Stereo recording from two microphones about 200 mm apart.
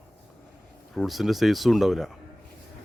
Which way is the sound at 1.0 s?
Centre (ahead or behind).